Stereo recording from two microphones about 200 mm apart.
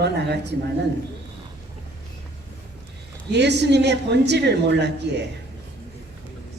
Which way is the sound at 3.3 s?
60° right (ahead or behind).